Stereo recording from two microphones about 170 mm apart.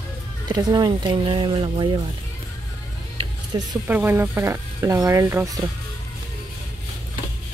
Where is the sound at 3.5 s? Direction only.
20° right (ahead or behind).